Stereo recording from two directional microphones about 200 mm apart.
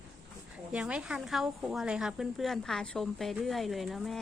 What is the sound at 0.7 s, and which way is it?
A woman's voice, 5° right (ahead or behind).